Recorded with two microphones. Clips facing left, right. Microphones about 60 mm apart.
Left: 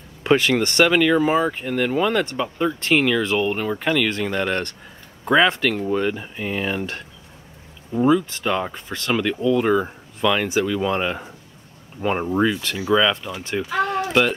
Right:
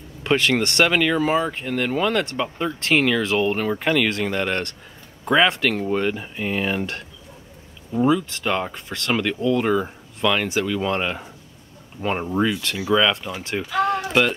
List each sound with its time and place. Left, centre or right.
0.2 s speech: centre
7.9 s speech: centre
13.8 s a sound: centre